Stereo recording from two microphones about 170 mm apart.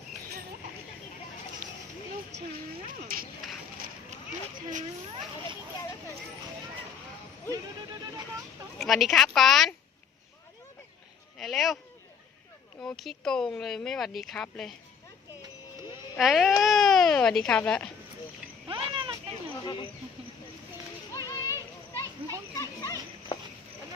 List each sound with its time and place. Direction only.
3.1 s speech: 60° right (ahead or behind)
8.8 s speech: centre (ahead or behind)
11.3 s speech: centre (ahead or behind)
12.8 s speech: centre (ahead or behind)
16.1 s speech: centre (ahead or behind)
18.7 s a sound: 30° right (ahead or behind)
21.1 s children playing: 20° left (ahead or behind)
22.5 s dog: 20° left (ahead or behind)